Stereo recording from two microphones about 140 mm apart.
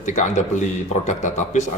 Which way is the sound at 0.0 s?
60° left (ahead or behind).